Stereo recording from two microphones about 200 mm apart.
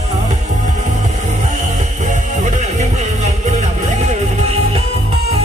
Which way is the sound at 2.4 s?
35° right (ahead or behind).